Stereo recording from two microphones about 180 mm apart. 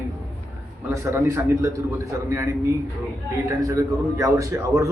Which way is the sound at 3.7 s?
20° right (ahead or behind).